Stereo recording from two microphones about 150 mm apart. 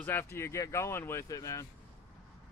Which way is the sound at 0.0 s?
15° left (ahead or behind).